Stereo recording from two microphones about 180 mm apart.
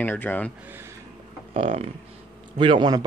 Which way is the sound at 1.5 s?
30° right (ahead or behind).